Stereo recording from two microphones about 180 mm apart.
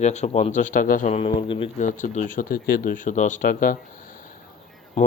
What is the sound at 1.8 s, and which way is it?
Speech, 45° left (ahead or behind).